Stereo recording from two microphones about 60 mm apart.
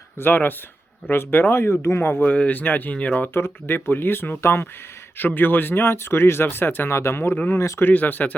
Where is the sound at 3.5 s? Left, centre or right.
Left.